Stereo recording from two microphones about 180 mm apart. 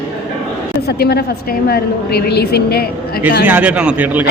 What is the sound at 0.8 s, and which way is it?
A woman's voice, 60° left (ahead or behind).